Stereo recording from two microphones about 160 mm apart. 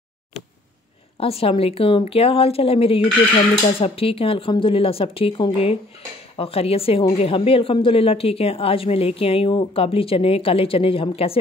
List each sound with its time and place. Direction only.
1.2 s a woman's voice: 35° left (ahead or behind)